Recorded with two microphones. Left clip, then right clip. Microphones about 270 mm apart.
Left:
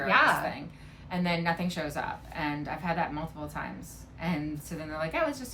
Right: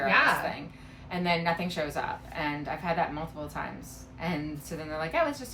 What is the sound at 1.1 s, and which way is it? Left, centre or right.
A woman's voice, centre.